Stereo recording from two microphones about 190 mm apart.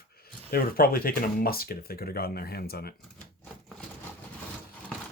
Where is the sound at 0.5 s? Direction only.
50° left (ahead or behind).